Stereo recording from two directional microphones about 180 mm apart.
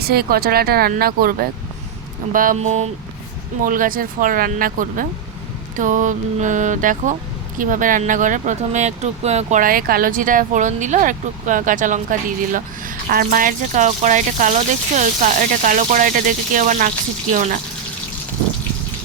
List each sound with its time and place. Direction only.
0.0 s speech: 60° right (ahead or behind); by 2.9 s 40° right (ahead or behind)
3.6 s speech: 50° right (ahead or behind)